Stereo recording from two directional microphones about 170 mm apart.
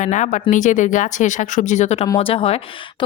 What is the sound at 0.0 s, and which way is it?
Speech, 45° left (ahead or behind).